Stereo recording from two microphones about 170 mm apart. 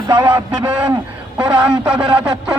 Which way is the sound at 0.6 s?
5° right (ahead or behind).